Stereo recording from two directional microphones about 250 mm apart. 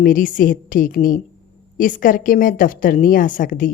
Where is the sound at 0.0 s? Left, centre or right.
Left.